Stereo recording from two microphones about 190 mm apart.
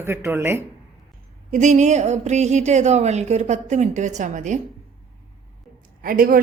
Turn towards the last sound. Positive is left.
turn(degrees=-45)  # may be behind; listen again after turning